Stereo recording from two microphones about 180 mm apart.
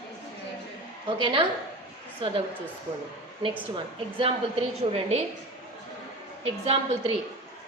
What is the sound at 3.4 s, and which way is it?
A woman's voice, 30° right (ahead or behind).